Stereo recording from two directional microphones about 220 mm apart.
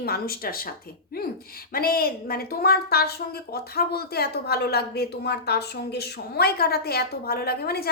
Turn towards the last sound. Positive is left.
turn(degrees=45)  # may be behind; listen again after turning